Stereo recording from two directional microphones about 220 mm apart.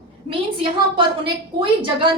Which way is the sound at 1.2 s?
20° right (ahead or behind).